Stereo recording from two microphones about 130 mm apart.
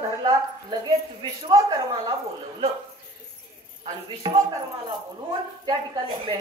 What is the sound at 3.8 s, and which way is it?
Speech, 45° right (ahead or behind).